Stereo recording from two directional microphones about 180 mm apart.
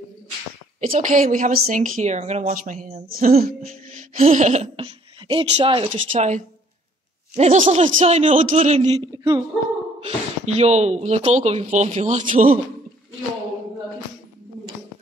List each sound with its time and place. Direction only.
0.7 s a woman's voice: 45° right (ahead or behind); by 6.2 s 30° right (ahead or behind)
7.3 s speech: 35° right (ahead or behind)
9.1 s speech: 25° right (ahead or behind)
9.9 s speech: 35° right (ahead or behind)